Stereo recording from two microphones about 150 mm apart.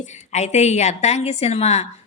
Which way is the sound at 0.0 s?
50° left (ahead or behind).